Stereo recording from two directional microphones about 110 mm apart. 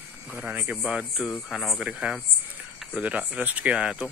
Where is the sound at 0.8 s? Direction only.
Centre (ahead or behind).